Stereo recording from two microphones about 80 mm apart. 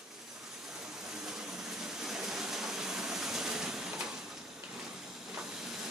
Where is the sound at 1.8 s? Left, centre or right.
Centre.